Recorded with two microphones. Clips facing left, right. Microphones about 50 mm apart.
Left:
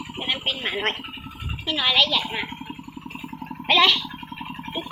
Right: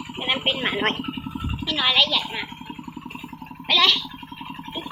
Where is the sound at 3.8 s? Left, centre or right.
Centre.